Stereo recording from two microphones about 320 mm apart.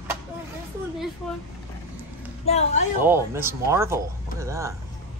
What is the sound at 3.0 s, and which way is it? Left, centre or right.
Speech, centre.